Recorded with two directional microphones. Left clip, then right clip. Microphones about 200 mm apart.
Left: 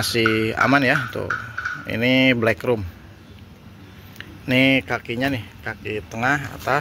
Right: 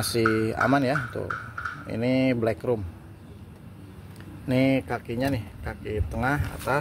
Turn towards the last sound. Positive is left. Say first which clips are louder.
# left 6 dB
turn(degrees=0)  # may be behind; listen again after turning